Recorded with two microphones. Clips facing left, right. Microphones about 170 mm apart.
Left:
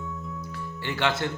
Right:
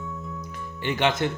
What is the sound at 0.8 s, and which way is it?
Speech, 20° right (ahead or behind).